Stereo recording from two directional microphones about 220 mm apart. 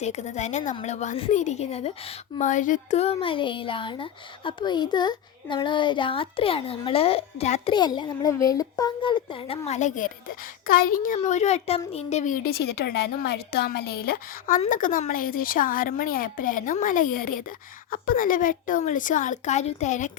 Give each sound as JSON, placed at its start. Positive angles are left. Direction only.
{"t": 0.0, "sound": "a woman's voice", "side_deg": 30}